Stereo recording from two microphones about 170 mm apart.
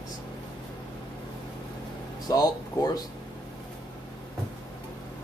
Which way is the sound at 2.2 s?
20° left (ahead or behind).